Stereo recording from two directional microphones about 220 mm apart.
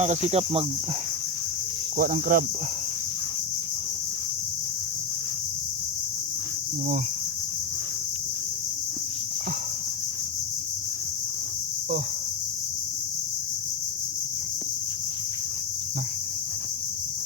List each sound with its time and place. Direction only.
0.0 s speech: 30° right (ahead or behind)
2.0 s speech: 40° right (ahead or behind)